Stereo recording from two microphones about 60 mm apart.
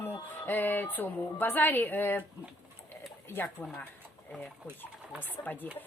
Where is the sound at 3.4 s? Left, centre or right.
Left.